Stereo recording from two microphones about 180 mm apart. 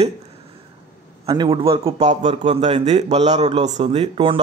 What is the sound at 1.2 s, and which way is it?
A man's voice, 25° right (ahead or behind).